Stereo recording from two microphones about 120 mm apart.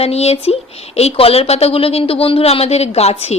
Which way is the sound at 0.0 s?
60° left (ahead or behind).